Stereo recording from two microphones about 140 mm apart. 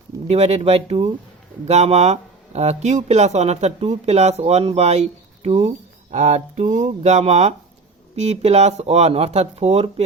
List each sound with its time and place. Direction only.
0.3 s speech: 50° right (ahead or behind)